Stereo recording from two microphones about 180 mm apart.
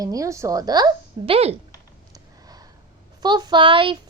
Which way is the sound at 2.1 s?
20° right (ahead or behind).